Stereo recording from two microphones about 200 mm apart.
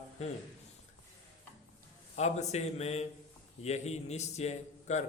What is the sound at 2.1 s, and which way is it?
A man's voice, 35° left (ahead or behind).